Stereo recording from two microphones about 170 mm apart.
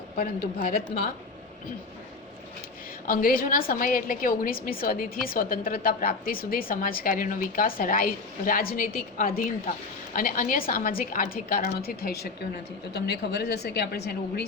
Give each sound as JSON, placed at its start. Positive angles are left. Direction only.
{"t": 0.2, "sound": "a woman's voice", "side_deg": 60}
{"t": 3.1, "sound": "a woman's voice", "side_deg": 55}